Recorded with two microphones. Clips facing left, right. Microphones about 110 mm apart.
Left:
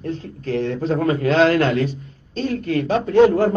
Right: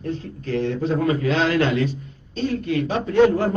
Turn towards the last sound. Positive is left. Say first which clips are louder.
# left 3 dB
turn(degrees=40)  # may be behind; listen again after turning